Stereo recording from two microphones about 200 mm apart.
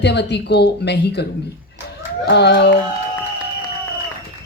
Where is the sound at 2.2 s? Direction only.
55° left (ahead or behind).